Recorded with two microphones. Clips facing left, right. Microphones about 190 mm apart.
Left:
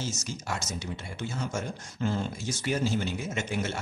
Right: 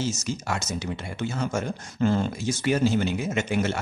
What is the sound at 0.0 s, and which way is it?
Speech, 75° right (ahead or behind).